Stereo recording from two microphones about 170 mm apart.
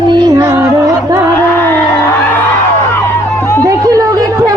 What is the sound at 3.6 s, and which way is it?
Chatter, 20° right (ahead or behind).